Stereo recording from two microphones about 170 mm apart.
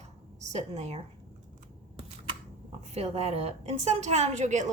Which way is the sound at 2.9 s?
40° right (ahead or behind).